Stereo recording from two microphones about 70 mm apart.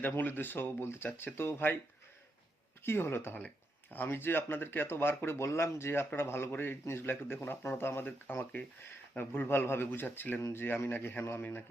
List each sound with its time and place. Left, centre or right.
0.0 s speech: left
2.8 s speech: left